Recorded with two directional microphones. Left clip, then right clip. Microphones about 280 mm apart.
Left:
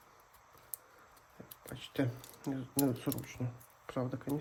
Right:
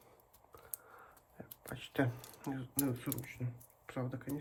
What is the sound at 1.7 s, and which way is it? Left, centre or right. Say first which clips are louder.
Speech: right 1 dB; centre.